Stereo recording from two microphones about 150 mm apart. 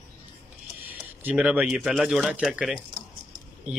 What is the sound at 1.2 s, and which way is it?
Speech, 10° right (ahead or behind).